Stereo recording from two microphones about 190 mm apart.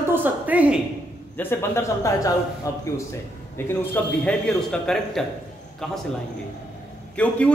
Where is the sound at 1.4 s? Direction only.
10° left (ahead or behind).